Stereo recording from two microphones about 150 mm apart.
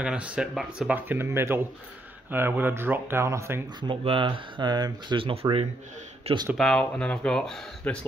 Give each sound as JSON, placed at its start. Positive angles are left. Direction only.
{"t": 0.0, "sound": "speech", "side_deg": -5}
{"t": 3.8, "sound": "speech", "side_deg": -35}
{"t": 6.5, "sound": "speech", "side_deg": 5}